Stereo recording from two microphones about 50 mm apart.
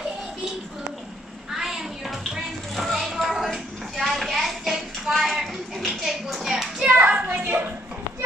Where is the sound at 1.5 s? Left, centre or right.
Centre.